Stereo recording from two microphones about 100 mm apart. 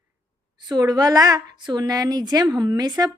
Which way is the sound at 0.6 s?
40° right (ahead or behind).